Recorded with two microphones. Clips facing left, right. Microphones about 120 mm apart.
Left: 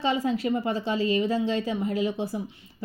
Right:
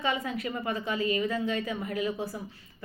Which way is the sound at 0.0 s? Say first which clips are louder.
Left 5 dB; 30° left (ahead or behind).